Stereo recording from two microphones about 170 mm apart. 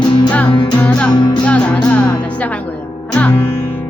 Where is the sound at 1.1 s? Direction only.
25° left (ahead or behind).